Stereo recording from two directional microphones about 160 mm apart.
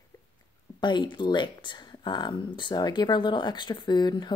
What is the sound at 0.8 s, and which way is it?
A woman's voice, 30° left (ahead or behind).